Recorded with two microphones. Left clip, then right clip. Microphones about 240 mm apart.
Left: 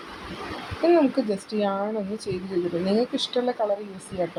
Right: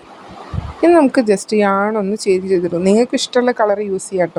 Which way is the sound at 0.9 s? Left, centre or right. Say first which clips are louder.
Right 9 dB; right.